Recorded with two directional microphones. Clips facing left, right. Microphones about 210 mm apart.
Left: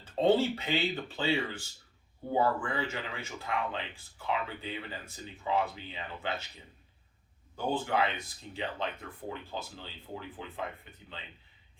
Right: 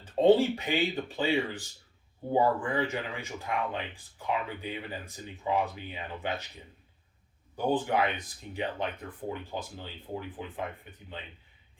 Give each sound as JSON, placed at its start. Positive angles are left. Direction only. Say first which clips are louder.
{"t": 0.0, "sound": "speech", "louder": "right 4 dB", "side_deg": -15}
{"t": 7.5, "sound": "speech", "louder": "right 3 dB", "side_deg": -15}